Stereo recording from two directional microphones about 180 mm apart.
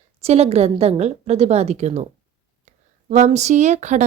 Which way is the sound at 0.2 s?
35° right (ahead or behind).